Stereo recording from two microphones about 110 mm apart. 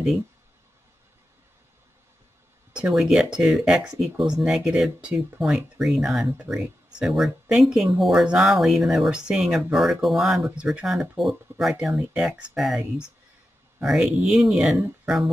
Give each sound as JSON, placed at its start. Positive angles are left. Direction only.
{"t": 2.7, "sound": "speech", "side_deg": -5}
{"t": 14.3, "sound": "speech", "side_deg": -5}